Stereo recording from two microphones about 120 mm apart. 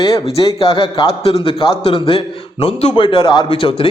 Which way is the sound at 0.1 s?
55° left (ahead or behind).